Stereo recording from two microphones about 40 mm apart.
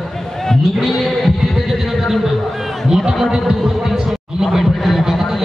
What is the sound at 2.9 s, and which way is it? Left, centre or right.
Heart sounds, centre.